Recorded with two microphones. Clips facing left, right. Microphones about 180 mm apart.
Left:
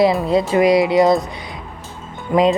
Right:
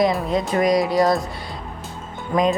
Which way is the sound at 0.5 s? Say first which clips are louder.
Left 4 dB; 20° left (ahead or behind).